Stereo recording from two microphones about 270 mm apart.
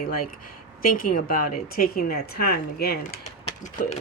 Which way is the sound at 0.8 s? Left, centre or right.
Left.